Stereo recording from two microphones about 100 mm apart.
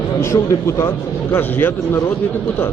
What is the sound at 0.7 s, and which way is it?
A man's voice, 25° left (ahead or behind).